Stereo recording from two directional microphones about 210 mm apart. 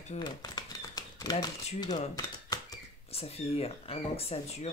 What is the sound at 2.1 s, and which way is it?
Typewriter, 15° left (ahead or behind).